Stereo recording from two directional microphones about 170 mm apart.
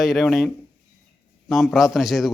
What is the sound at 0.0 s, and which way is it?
A man's voice, centre (ahead or behind).